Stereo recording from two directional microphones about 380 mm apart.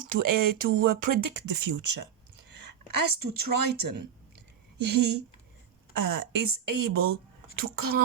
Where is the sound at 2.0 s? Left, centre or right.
Right.